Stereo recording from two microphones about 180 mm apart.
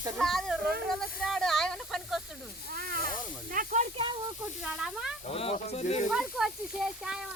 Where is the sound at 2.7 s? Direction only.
55° right (ahead or behind).